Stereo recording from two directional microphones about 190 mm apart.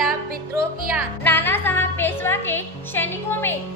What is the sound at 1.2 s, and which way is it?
A woman's voice, 10° left (ahead or behind).